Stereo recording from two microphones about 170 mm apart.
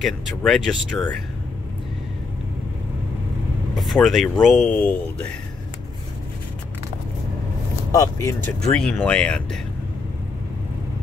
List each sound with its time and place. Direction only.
0.0 s speech: centre (ahead or behind)
3.7 s speech: centre (ahead or behind)
7.9 s speech: 20° left (ahead or behind)
8.7 s speech: 5° left (ahead or behind)